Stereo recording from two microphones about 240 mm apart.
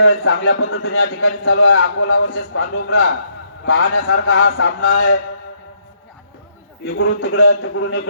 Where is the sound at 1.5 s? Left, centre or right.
Left.